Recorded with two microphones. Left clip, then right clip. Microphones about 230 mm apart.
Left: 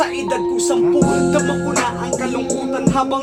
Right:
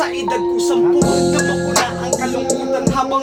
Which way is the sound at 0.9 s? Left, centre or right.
Right.